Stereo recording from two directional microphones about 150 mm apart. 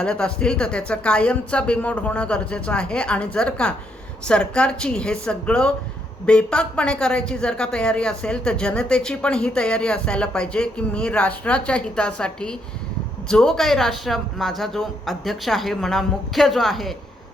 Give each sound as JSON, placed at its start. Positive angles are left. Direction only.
{"t": 0.0, "sound": "a woman's voice", "side_deg": 5}